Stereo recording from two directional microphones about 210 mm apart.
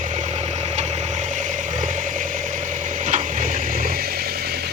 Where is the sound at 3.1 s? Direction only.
40° right (ahead or behind).